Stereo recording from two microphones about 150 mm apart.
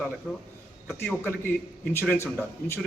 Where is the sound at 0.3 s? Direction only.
5° left (ahead or behind).